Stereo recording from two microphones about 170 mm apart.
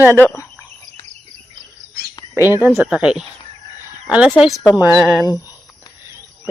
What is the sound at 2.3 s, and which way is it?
Speech, 15° right (ahead or behind).